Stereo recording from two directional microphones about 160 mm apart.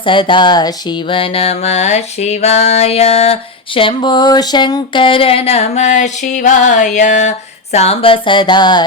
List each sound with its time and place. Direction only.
0.0 s speech: 30° left (ahead or behind)